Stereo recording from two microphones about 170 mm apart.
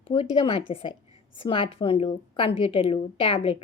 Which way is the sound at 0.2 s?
35° left (ahead or behind).